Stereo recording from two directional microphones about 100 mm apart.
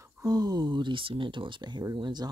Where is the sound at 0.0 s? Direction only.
40° right (ahead or behind).